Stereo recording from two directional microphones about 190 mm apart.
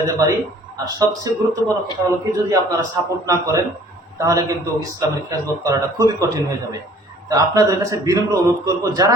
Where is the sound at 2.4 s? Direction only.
15° right (ahead or behind).